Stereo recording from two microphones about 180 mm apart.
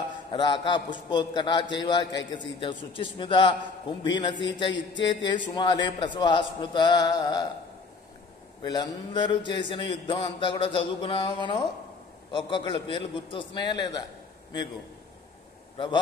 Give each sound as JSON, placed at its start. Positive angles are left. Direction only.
{"t": 0.3, "sound": "a man's voice", "side_deg": 25}
{"t": 8.6, "sound": "a man's voice", "side_deg": 25}